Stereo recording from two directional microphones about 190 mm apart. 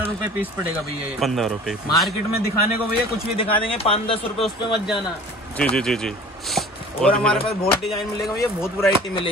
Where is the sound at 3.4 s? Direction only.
30° left (ahead or behind).